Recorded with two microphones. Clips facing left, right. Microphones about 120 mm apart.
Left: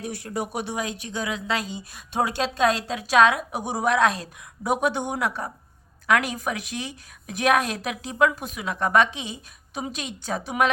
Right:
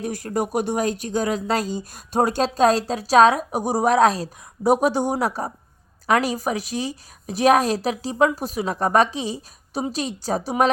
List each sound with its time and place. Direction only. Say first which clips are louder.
0.0 s speech: right 5 dB; 45° right (ahead or behind)